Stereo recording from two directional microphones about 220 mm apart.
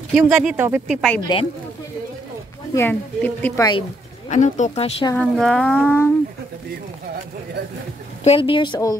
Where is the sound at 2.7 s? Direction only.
10° left (ahead or behind).